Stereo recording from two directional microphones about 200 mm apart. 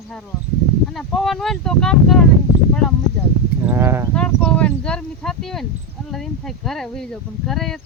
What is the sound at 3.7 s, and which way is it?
Speech, 10° right (ahead or behind).